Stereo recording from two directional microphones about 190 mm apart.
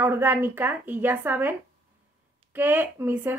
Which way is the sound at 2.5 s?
10° right (ahead or behind).